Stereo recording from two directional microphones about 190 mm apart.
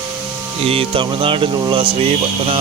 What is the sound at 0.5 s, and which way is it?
Speech, 30° right (ahead or behind).